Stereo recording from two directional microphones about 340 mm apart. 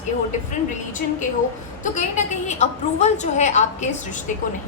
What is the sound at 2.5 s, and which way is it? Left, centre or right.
A woman's voice, centre.